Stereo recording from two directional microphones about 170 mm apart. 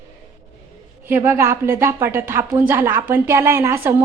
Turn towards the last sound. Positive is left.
turn(degrees=-15)  # may be behind; listen again after turning